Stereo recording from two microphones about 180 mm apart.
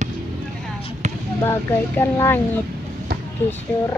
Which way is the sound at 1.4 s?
15° left (ahead or behind).